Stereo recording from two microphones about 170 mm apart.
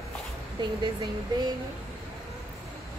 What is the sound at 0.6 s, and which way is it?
Speech, 30° right (ahead or behind).